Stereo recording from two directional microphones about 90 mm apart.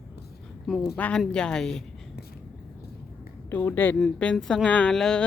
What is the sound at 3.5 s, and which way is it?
Speech, 20° left (ahead or behind).